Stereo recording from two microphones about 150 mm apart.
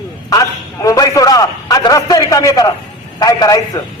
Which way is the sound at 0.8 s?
25° left (ahead or behind).